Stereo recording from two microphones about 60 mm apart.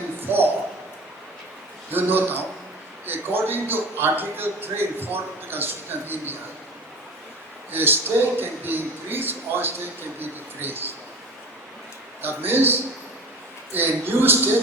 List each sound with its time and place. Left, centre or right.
0.2 s a sound: right
1.9 s a man's voice: right
7.7 s a man's voice: right
12.2 s a man's voice: right